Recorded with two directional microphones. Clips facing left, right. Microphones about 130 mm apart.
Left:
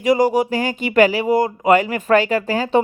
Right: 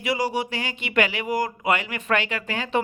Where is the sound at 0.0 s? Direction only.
45° left (ahead or behind); by 1.5 s 30° left (ahead or behind).